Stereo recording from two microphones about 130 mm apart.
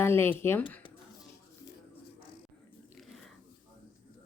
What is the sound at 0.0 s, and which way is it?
Speech, 20° left (ahead or behind).